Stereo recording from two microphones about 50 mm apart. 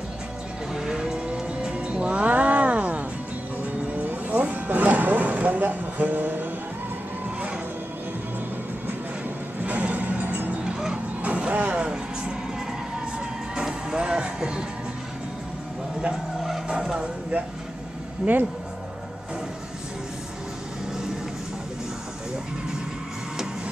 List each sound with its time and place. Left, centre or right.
0.7 s music: centre; by 6.4 s right
9.7 s a sound: right
10.6 s music: centre
13.6 s music: centre
16.6 s vehicle: centre
18.2 s speech: right